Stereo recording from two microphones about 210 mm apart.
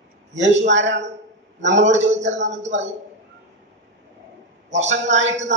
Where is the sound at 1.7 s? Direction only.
35° right (ahead or behind).